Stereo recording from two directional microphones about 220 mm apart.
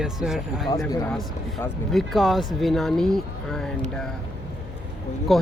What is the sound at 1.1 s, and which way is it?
Speech, centre (ahead or behind).